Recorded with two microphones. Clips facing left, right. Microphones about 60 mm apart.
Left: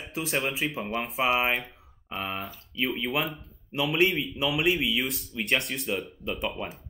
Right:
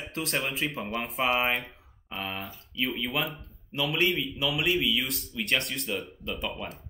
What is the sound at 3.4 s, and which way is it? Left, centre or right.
Speech, centre.